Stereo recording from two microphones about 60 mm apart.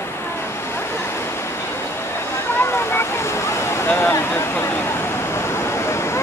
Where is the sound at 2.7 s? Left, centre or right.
Left.